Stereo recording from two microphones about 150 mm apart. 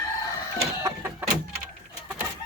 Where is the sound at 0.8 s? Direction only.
15° right (ahead or behind).